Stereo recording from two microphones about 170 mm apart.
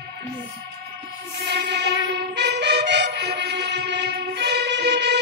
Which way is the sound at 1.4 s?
75° right (ahead or behind).